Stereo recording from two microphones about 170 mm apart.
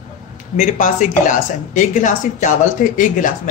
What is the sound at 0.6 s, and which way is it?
Speech, 50° left (ahead or behind).